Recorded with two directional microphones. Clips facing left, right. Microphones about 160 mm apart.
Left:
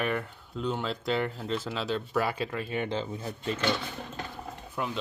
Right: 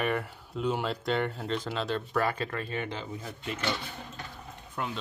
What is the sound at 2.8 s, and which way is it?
Speech, 25° left (ahead or behind).